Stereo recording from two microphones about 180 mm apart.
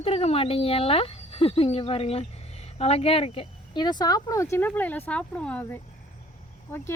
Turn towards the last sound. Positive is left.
turn(degrees=15)  # may be behind; listen again after turning